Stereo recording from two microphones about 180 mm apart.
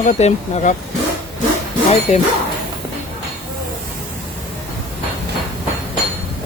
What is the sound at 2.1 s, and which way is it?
Speech, 35° left (ahead or behind).